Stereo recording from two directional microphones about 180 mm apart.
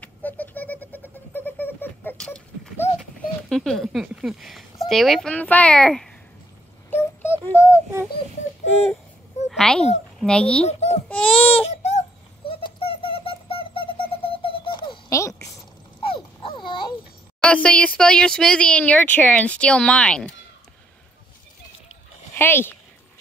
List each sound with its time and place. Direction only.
0.0 s a sound: 10° left (ahead or behind)
4.8 s speech: centre (ahead or behind)
6.9 s a sound: 10° left (ahead or behind)
7.7 s a sound: 10° right (ahead or behind)
9.5 s a child's voice: centre (ahead or behind)
10.7 s baby cry: 35° left (ahead or behind)
11.1 s speech: 5° left (ahead or behind)
11.5 s a sound: 35° left (ahead or behind)
12.4 s owl: 30° left (ahead or behind)
16.0 s dog: 30° left (ahead or behind)
17.4 s speech: 5° left (ahead or behind)
22.4 s speech: 10° left (ahead or behind)